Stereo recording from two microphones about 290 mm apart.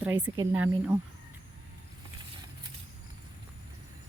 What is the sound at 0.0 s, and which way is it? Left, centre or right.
Speech, centre.